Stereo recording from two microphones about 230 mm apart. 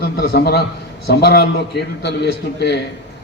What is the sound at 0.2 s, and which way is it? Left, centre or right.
A man's voice, left.